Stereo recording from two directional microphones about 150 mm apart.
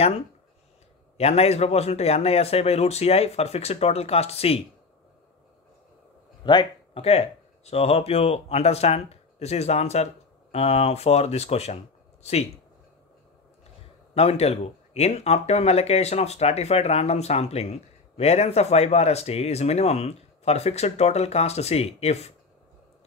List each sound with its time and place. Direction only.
1.1 s speech: 45° left (ahead or behind)
6.4 s speech: 30° left (ahead or behind)
14.1 s speech: 45° left (ahead or behind)